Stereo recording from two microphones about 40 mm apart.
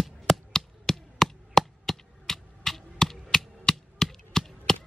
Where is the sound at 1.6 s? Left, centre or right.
Centre.